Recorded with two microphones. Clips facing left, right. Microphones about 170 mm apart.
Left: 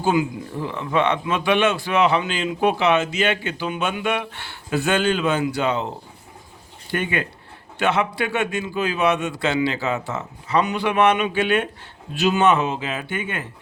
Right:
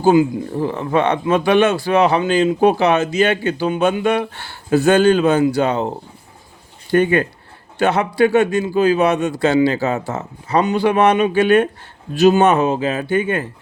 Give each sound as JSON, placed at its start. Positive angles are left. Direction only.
{"t": 0.0, "sound": "a man's voice", "side_deg": -35}
{"t": 6.9, "sound": "a man's voice", "side_deg": -40}